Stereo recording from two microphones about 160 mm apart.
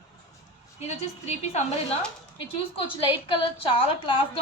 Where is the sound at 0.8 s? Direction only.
45° left (ahead or behind).